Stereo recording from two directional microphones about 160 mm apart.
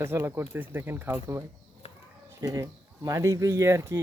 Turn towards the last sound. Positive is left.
turn(degrees=-15)  # may be behind; listen again after turning